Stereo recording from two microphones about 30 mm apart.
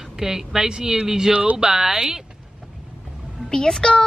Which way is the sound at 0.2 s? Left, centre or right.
Centre.